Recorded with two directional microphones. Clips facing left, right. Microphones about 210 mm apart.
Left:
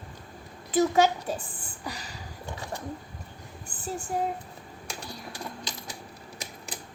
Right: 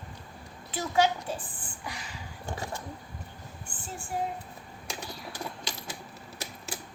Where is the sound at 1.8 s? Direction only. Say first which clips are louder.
Left 3 dB; 35° left (ahead or behind).